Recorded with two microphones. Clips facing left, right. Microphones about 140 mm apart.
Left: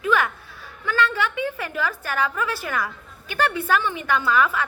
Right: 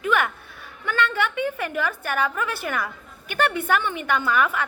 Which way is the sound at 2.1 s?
20° right (ahead or behind).